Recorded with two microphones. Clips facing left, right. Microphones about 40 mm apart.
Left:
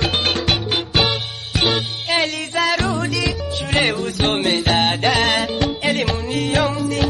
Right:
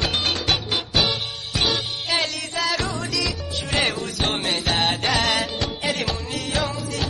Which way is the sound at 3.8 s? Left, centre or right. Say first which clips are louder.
Left 5 dB; centre.